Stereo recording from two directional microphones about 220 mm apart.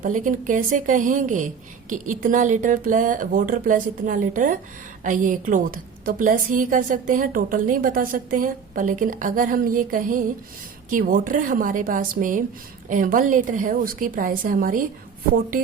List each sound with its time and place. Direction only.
0.0 s a woman's voice: 35° right (ahead or behind)